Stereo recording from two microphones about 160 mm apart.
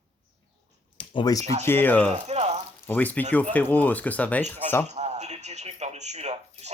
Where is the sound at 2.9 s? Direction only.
10° left (ahead or behind).